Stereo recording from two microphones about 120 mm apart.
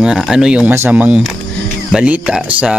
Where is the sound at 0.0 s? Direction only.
5° right (ahead or behind).